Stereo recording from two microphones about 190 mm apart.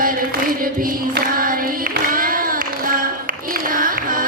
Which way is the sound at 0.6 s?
50° right (ahead or behind).